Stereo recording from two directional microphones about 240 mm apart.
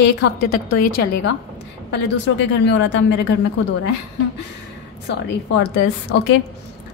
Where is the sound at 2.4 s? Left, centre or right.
Left.